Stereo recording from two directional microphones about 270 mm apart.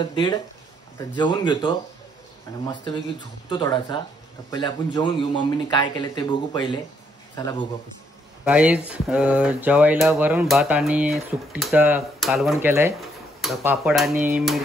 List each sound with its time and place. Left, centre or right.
0.0 s a man's voice: centre
2.8 s a man's voice: centre
8.5 s speech: centre